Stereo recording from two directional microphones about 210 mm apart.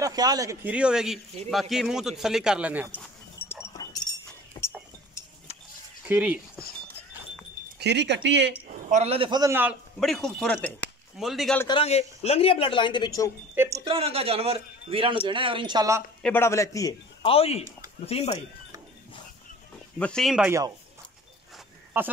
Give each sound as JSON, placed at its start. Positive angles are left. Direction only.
{"t": 0.0, "sound": "speech", "side_deg": -20}
{"t": 3.4, "sound": "chink", "side_deg": 10}
{"t": 3.7, "sound": "dog", "side_deg": 20}
{"t": 4.6, "sound": "chink", "side_deg": 15}
{"t": 6.0, "sound": "speech", "side_deg": -5}
{"t": 7.8, "sound": "speech", "side_deg": -55}
{"t": 8.9, "sound": "a man's voice", "side_deg": -30}
{"t": 9.9, "sound": "speech", "side_deg": 0}
{"t": 11.6, "sound": "speech", "side_deg": 25}
{"t": 13.6, "sound": "speech", "side_deg": -15}
{"t": 13.9, "sound": "a man's voice", "side_deg": -25}
{"t": 16.2, "sound": "a man's voice", "side_deg": 10}
{"t": 20.0, "sound": "speech", "side_deg": 5}